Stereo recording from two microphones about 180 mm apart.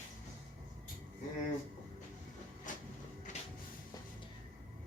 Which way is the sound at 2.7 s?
45° left (ahead or behind).